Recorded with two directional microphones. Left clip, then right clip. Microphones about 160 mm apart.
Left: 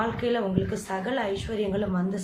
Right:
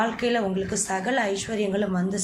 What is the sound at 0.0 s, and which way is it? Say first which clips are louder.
A woman's voice: right 2 dB; 5° right (ahead or behind).